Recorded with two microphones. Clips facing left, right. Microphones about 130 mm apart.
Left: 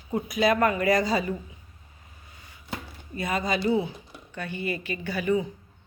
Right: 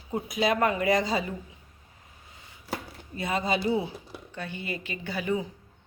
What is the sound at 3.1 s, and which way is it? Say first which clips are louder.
Speech: even; 25° right (ahead or behind).